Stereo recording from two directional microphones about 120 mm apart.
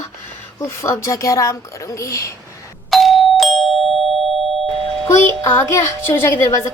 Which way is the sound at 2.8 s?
Centre (ahead or behind).